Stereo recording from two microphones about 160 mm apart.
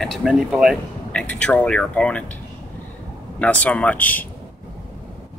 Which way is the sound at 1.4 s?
10° left (ahead or behind).